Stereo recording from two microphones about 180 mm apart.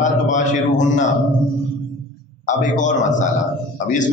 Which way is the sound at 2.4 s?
40° left (ahead or behind).